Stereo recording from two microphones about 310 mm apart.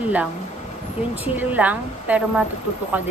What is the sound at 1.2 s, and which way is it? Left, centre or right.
Speech, centre.